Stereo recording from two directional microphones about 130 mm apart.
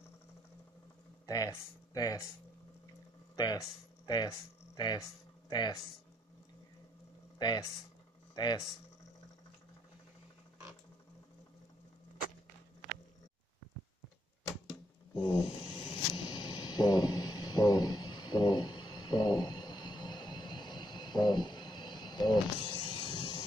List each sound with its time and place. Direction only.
1.2 s speech: 25° left (ahead or behind)
3.3 s speech: 30° left (ahead or behind)
7.3 s speech: 35° left (ahead or behind)
14.7 s a sound: 35° left (ahead or behind)